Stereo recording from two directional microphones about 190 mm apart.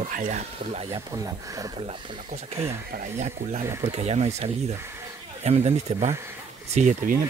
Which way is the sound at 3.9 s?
35° right (ahead or behind).